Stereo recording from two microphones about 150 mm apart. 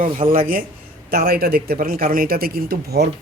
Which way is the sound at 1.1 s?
90° right.